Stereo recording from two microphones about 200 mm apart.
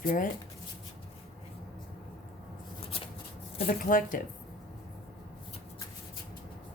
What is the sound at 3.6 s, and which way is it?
Speech, 45° left (ahead or behind).